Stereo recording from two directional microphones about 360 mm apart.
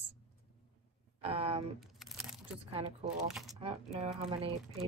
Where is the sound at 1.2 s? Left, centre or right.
Centre.